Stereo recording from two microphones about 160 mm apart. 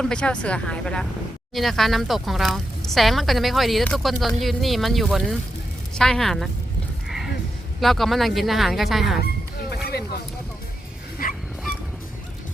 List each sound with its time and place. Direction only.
0.0 s speech: 5° left (ahead or behind)
7.8 s speech: centre (ahead or behind)
11.2 s dog: 60° left (ahead or behind)